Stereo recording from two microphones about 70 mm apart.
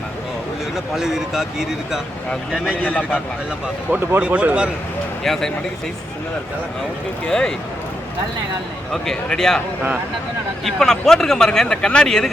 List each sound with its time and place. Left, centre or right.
0.9 s speech: centre
2.8 s a man's voice: centre
4.2 s speech: right
5.2 s speech: centre
7.3 s speech: centre
8.9 s speech: centre
10.6 s speech: centre